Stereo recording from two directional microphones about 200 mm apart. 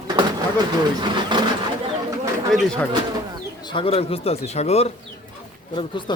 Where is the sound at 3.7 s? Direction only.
30° left (ahead or behind).